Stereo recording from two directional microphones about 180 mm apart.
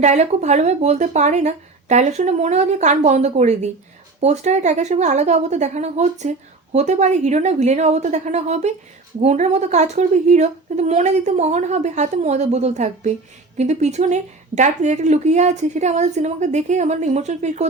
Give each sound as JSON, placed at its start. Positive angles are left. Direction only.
{"t": 0.0, "sound": "a woman's voice", "side_deg": -40}